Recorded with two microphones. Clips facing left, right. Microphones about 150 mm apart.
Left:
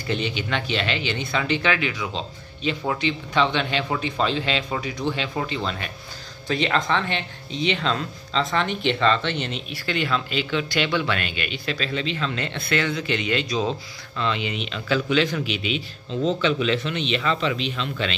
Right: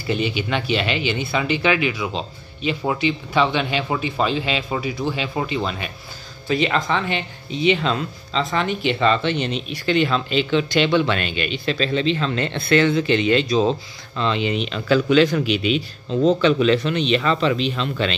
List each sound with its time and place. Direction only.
0.0 s speech: 10° right (ahead or behind); by 18.1 s 40° right (ahead or behind)